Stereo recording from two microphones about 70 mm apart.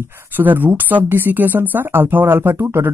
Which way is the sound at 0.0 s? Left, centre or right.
Right.